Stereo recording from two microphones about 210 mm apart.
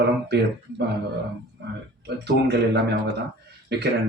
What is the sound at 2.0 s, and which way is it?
Speech, 50° right (ahead or behind).